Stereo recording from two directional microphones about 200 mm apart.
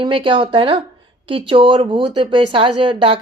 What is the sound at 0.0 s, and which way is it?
A woman's voice, 25° right (ahead or behind).